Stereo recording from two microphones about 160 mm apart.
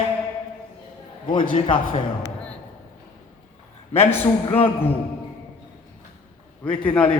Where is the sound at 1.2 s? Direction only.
35° left (ahead or behind).